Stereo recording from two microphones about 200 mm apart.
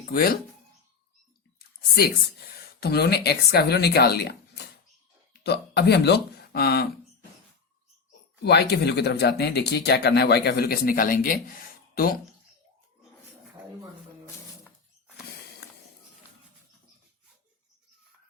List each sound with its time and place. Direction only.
0.0 s speech: 50° left (ahead or behind)
1.5 s a sound: 50° left (ahead or behind)
2.8 s speech: 55° left (ahead or behind)
8.4 s speech: 55° left (ahead or behind)